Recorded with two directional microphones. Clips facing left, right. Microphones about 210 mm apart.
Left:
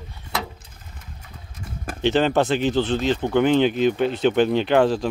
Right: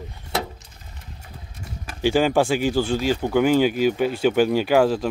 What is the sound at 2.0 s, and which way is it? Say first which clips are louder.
Speech: even; 10° right (ahead or behind).